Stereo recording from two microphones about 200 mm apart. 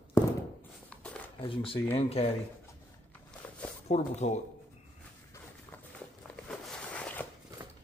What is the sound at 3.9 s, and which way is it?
Speech, 35° left (ahead or behind).